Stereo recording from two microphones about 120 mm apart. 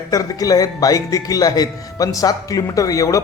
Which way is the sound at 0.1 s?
30° left (ahead or behind).